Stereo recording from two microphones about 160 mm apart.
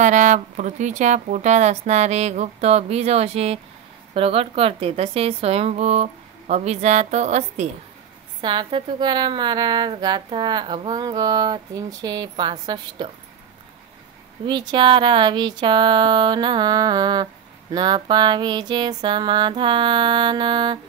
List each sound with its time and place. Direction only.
0.0 s a woman's voice: 50° right (ahead or behind)
8.4 s speech: 30° right (ahead or behind)
14.4 s speech: 30° right (ahead or behind)